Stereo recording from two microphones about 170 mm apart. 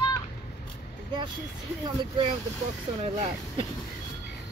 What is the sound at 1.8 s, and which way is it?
Speech, 30° right (ahead or behind).